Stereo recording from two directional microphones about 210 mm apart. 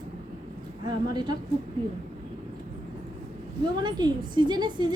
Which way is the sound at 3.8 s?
20° right (ahead or behind).